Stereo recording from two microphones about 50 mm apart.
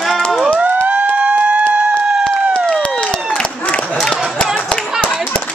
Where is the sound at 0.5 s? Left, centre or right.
Right.